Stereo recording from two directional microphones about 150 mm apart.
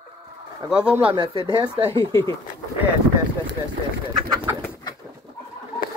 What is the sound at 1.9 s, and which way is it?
Speech, 15° left (ahead or behind).